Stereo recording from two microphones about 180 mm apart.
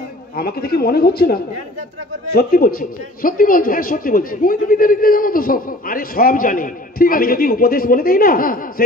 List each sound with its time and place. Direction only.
0.4 s a man's voice: 55° left (ahead or behind)